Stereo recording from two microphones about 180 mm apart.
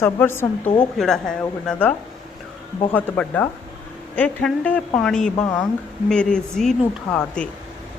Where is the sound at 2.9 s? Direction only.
10° left (ahead or behind).